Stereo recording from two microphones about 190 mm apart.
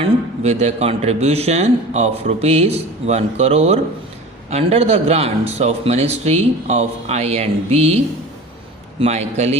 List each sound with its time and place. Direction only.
0.0 s a man's voice: 35° right (ahead or behind)
9.0 s a man's voice: 35° right (ahead or behind)